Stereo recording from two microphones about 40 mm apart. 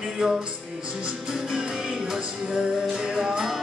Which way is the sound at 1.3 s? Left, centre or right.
Centre.